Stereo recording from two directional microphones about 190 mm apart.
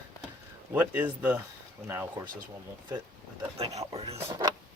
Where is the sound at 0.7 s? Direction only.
10° right (ahead or behind).